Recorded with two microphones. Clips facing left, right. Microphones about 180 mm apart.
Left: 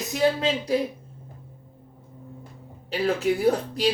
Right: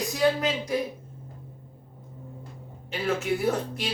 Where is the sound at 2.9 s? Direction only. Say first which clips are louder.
Left 4 dB; 35° left (ahead or behind).